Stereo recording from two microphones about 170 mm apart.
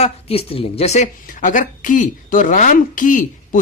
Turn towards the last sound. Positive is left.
turn(degrees=50)  # may be behind; listen again after turning